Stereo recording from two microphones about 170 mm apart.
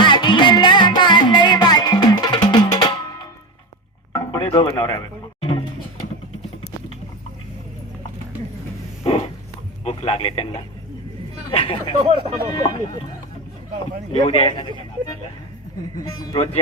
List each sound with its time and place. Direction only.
0.0 s music: 30° left (ahead or behind)
4.1 s a sound: 25° left (ahead or behind)
9.0 s a sound: 35° left (ahead or behind)
9.8 s a man's voice: 35° left (ahead or behind)
11.5 s speech: 35° left (ahead or behind)
12.0 s speech: 35° right (ahead or behind)
12.5 s speech: 20° left (ahead or behind)
14.1 s speech: 35° left (ahead or behind)